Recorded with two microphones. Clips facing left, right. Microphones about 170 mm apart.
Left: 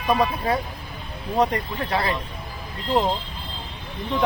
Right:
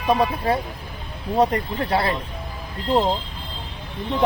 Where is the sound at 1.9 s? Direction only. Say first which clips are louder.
Right 2 dB; 30° right (ahead or behind).